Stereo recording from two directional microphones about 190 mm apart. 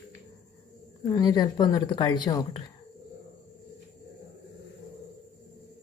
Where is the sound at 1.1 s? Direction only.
20° left (ahead or behind).